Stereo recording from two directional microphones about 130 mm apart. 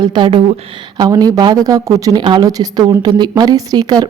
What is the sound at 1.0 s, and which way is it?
A woman's voice, 30° right (ahead or behind).